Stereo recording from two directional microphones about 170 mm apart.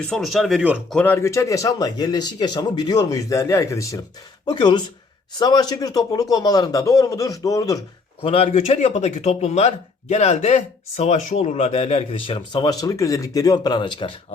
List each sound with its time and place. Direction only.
0.0 s speech: centre (ahead or behind)
0.9 s speech: 10° left (ahead or behind)
8.2 s speech: 35° left (ahead or behind)